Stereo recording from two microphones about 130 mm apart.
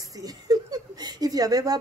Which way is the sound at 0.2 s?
30° right (ahead or behind).